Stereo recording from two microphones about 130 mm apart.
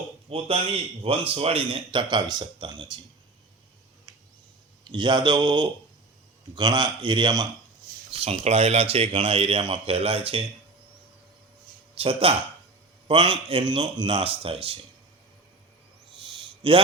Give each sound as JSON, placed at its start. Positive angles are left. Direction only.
{"t": 0.3, "sound": "speech", "side_deg": -45}
{"t": 4.9, "sound": "speech", "side_deg": -35}
{"t": 8.1, "sound": "speech", "side_deg": -50}
{"t": 11.9, "sound": "speech", "side_deg": -50}
{"t": 16.6, "sound": "speech", "side_deg": -40}